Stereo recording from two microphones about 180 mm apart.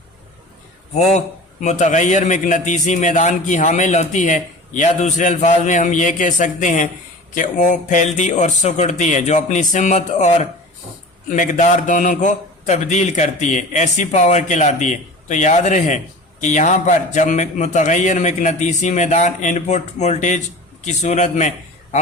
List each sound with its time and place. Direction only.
1.6 s a man's voice: 40° left (ahead or behind)